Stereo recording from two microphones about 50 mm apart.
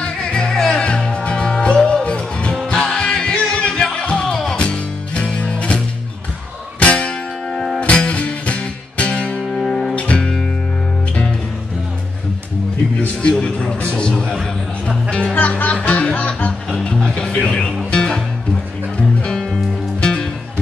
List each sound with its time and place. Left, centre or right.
0.0 s music: centre
6.8 s music: left
9.9 s music: left
13.0 s music: left
14.1 s music: centre
15.3 s music: left; by 18.2 s centre
20.0 s music: centre